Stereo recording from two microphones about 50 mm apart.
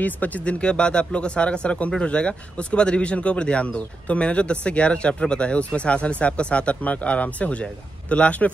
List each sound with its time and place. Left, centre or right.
0.0 s speech: left